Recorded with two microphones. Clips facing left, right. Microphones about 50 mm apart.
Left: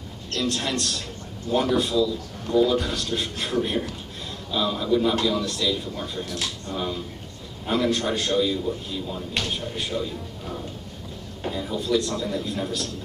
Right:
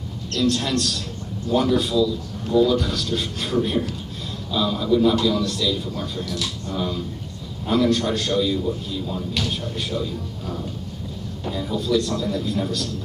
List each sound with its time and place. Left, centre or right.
0.5 s a man's voice: centre
6.2 s speech: left
6.7 s a man's voice: centre
11.4 s a man's voice: centre